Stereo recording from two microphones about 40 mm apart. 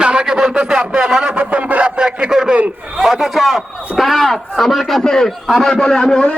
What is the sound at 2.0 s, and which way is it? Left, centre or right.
A man's voice, right.